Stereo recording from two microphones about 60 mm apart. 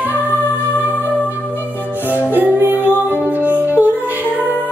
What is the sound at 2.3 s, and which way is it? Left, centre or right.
Music, right.